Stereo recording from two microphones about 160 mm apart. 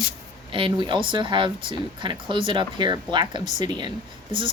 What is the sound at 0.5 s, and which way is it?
Speech, 30° right (ahead or behind).